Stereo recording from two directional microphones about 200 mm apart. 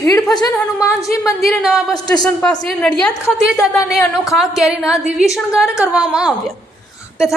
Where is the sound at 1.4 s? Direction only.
Centre (ahead or behind).